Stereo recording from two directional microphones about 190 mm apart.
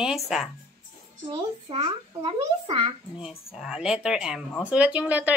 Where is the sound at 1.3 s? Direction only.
30° right (ahead or behind).